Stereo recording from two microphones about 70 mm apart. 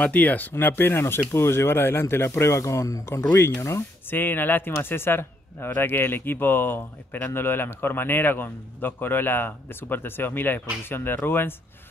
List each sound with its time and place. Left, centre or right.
0.0 s speech: left
4.1 s speech: left